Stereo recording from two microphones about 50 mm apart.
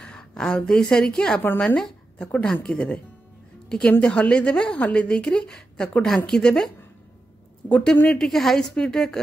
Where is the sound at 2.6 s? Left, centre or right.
Left.